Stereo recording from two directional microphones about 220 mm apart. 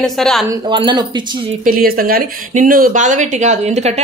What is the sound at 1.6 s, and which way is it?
Speech, 40° right (ahead or behind).